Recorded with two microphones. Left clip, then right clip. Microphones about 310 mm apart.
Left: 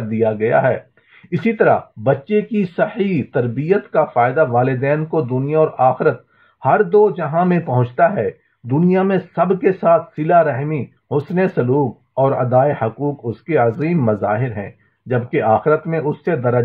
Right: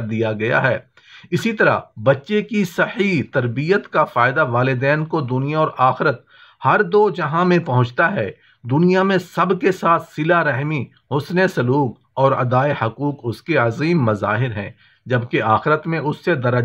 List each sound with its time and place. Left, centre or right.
0.1 s speech: right